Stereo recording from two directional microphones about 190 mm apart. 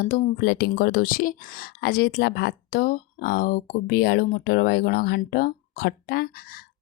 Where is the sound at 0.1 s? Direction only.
55° left (ahead or behind).